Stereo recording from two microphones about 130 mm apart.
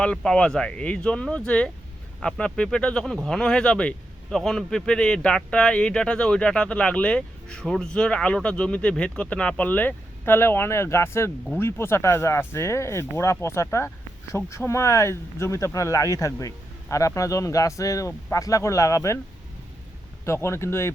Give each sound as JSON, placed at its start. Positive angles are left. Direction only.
{"t": 0.0, "sound": "a man's voice", "side_deg": 5}
{"t": 20.2, "sound": "speech", "side_deg": 20}